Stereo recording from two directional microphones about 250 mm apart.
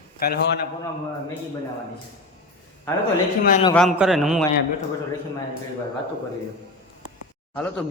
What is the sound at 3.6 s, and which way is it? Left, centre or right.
Speech, centre.